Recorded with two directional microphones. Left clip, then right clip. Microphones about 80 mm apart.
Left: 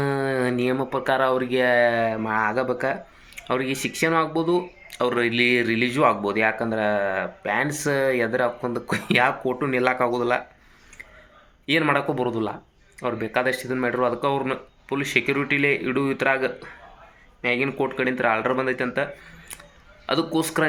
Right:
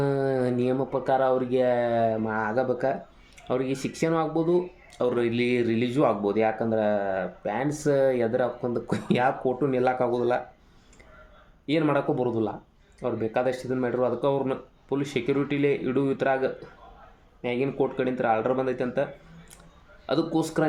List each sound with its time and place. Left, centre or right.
0.0 s a sound: right
0.9 s speech: right
11.8 s speech: right
20.1 s speech: right